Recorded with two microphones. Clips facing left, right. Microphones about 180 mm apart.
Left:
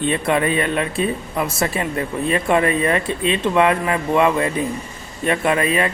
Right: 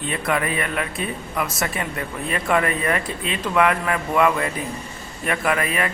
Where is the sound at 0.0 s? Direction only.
25° left (ahead or behind).